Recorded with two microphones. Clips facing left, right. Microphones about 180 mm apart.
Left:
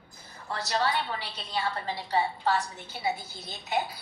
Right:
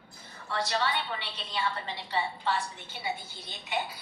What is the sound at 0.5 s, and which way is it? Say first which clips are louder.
A woman's voice: left 2 dB; 40° left (ahead or behind).